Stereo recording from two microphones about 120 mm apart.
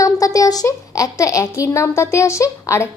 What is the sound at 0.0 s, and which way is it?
A woman's voice, 30° left (ahead or behind).